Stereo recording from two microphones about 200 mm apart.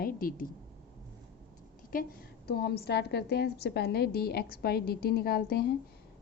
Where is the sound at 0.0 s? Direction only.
45° left (ahead or behind).